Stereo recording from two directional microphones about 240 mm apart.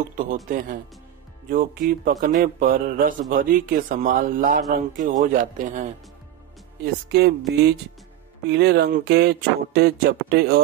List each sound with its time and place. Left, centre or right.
0.5 s mantra: right
6.8 s speech: right